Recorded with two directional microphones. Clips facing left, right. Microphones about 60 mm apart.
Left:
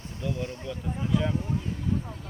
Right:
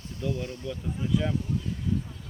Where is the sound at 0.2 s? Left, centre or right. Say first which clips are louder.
Right 1 dB; left.